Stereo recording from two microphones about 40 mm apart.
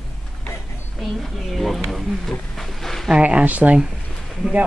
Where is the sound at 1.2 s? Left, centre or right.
Centre.